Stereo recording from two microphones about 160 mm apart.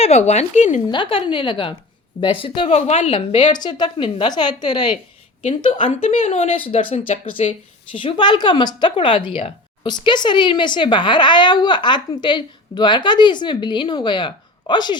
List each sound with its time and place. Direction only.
0.0 s a woman's voice: 45° left (ahead or behind)
0.9 s a woman's voice: 30° left (ahead or behind); by 3.1 s 45° left (ahead or behind)
3.1 s speech: 30° left (ahead or behind)
7.1 s a woman's voice: 45° left (ahead or behind)
7.9 s speech: 30° left (ahead or behind)